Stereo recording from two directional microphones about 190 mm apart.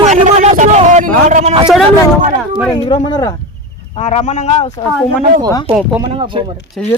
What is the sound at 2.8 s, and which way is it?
Speech, 25° left (ahead or behind).